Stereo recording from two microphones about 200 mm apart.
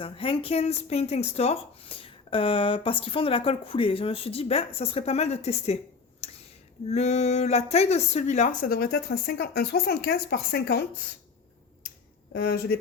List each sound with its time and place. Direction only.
0.0 s speech: 25° left (ahead or behind); by 10.8 s 55° left (ahead or behind)
12.3 s speech: 50° left (ahead or behind)